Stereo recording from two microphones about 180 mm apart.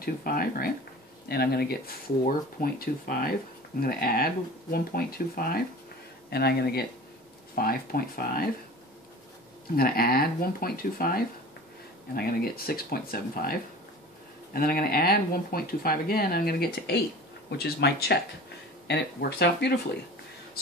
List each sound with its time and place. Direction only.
0.0 s speech: 55° left (ahead or behind)
9.8 s speech: 55° left (ahead or behind)